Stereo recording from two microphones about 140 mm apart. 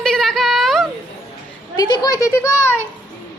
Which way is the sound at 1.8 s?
30° left (ahead or behind).